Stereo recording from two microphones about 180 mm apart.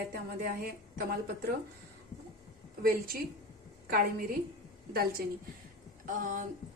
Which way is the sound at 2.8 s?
55° right (ahead or behind).